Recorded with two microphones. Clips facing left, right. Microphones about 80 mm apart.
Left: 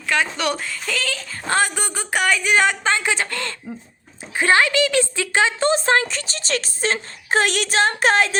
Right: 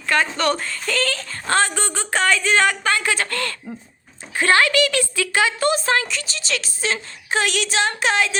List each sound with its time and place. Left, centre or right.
0.1 s a woman's voice: centre
1.5 s a woman's voice: centre; by 8.4 s left